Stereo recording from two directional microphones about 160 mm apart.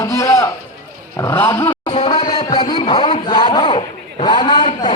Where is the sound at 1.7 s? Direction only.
35° left (ahead or behind).